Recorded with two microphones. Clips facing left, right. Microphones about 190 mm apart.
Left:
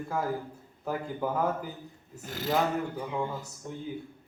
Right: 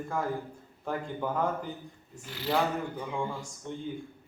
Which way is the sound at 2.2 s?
45° left (ahead or behind).